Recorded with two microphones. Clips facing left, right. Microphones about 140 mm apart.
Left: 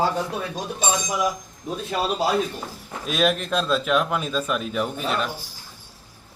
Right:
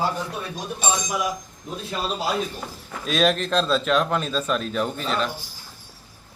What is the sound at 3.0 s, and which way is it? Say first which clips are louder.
A man's voice: right 1 dB; 5° left (ahead or behind).